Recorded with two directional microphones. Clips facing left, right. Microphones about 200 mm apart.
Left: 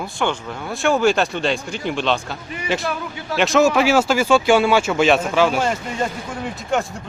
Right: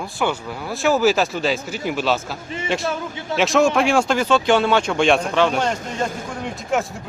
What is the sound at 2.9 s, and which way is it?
Speech, 25° right (ahead or behind).